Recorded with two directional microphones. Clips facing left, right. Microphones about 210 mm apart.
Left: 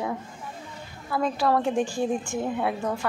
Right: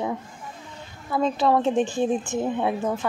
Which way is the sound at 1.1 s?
20° right (ahead or behind).